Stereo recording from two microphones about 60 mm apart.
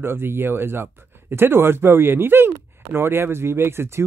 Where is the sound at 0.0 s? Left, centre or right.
Right.